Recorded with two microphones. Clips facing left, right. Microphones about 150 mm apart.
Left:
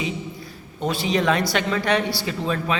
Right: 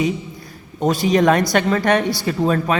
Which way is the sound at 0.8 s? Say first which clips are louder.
Right 6 dB; 45° right (ahead or behind).